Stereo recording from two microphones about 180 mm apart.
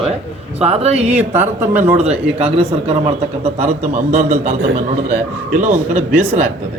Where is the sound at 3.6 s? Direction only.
45° right (ahead or behind).